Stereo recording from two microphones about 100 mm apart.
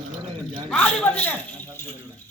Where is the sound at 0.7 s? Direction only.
15° left (ahead or behind).